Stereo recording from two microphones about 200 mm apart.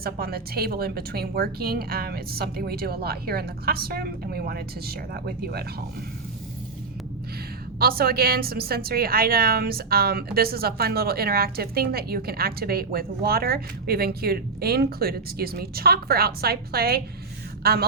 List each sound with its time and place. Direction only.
0.0 s a woman's voice: 50° right (ahead or behind)
7.8 s a woman's voice: 50° right (ahead or behind)